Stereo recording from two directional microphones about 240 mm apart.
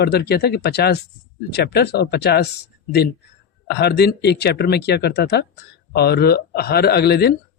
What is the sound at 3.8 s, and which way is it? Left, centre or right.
Speech, left.